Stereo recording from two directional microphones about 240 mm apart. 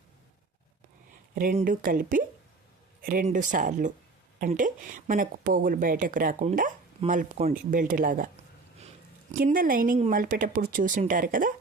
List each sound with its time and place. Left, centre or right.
1.4 s speech: right
9.4 s speech: right